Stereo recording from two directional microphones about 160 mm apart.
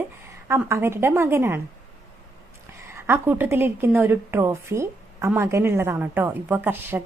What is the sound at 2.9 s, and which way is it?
A woman's voice, 15° right (ahead or behind).